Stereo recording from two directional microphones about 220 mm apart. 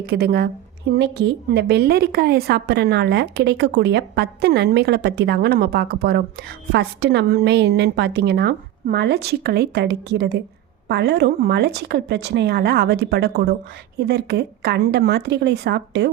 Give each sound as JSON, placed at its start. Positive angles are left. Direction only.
{"t": 0.0, "sound": "a woman's voice", "side_deg": -45}